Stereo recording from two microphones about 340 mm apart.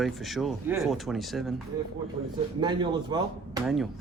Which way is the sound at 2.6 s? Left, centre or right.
Centre.